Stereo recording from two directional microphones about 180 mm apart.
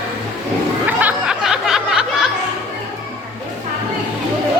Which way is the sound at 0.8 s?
5° right (ahead or behind).